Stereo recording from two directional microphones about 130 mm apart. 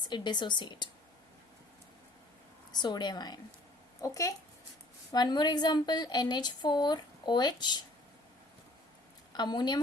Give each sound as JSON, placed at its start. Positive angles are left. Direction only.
{"t": 0.0, "sound": "a woman's voice", "side_deg": 35}
{"t": 2.7, "sound": "a woman's voice", "side_deg": 35}
{"t": 9.3, "sound": "a woman's voice", "side_deg": 35}